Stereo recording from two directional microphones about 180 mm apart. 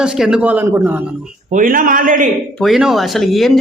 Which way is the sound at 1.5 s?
50° right (ahead or behind).